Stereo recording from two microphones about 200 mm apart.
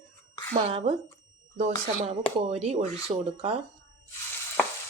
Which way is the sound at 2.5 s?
30° right (ahead or behind).